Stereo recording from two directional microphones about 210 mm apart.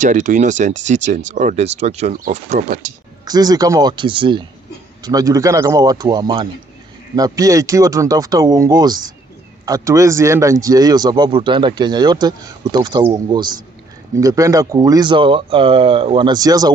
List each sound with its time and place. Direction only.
0.0 s speech: 35° right (ahead or behind)
3.2 s a man's voice: 20° right (ahead or behind)